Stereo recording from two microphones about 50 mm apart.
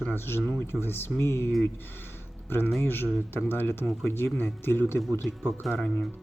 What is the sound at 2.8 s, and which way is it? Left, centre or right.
Speech, left.